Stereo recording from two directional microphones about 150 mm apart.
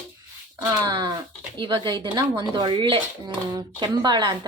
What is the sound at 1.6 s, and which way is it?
Speech, 35° right (ahead or behind).